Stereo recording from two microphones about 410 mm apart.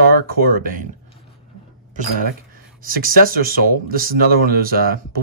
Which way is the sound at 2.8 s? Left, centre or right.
Right.